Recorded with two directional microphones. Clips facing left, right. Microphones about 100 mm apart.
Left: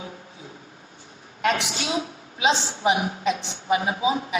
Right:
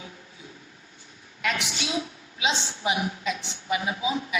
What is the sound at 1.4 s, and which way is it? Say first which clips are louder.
A woman's voice: left 5 dB; 35° left (ahead or behind).